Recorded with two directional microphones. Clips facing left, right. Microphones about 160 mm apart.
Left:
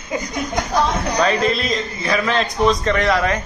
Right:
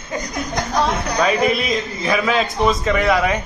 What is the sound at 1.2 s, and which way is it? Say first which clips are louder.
A man's voice: right 1 dB; 10° right (ahead or behind).